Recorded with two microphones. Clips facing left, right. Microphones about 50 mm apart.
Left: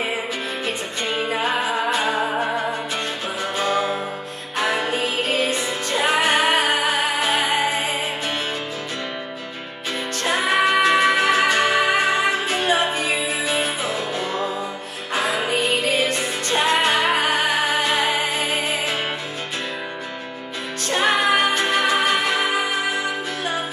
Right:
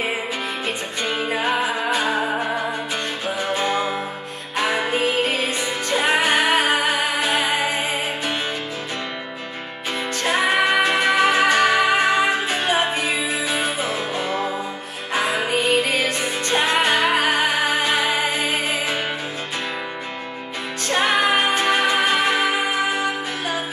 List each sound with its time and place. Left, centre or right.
1.3 s music: right
3.5 s music: right
10.2 s music: right
16.6 s music: right
20.9 s music: right